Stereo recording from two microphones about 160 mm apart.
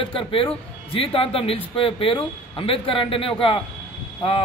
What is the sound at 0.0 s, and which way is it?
A man's voice, 35° left (ahead or behind).